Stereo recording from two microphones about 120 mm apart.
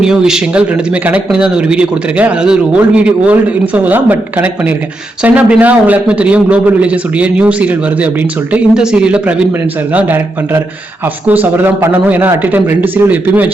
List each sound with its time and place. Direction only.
0.0 s speech: 5° right (ahead or behind)